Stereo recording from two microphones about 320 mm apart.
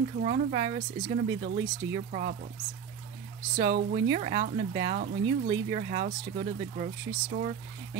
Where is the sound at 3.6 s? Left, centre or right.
Right.